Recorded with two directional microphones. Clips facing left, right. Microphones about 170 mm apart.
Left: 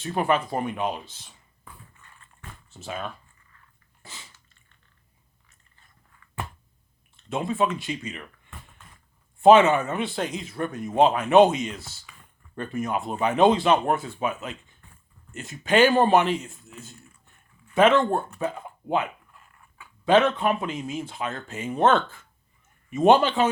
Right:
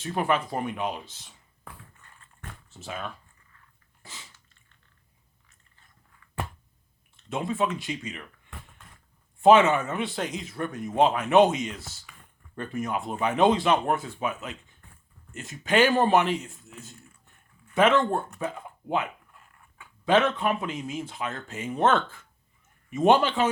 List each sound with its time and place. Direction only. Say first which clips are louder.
0.0 s speech: left 2 dB; 30° left (ahead or behind)
2.0 s dog: left 1 dB; 40° right (ahead or behind)
7.3 s speech: left 2 dB; 30° left (ahead or behind)
9.4 s a man's voice: left 2 dB; 30° left (ahead or behind)
12.1 s a sound: left 1 dB; 55° right (ahead or behind)
12.5 s a man's voice: left 2 dB; 30° left (ahead or behind)
17.7 s a man's voice: left 3 dB; 30° left (ahead or behind)
20.1 s a man's voice: left 3 dB; 30° left (ahead or behind)